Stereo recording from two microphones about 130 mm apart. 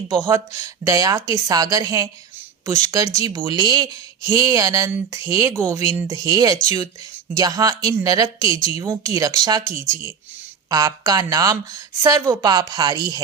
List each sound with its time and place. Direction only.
0.3 s speech: 25° right (ahead or behind)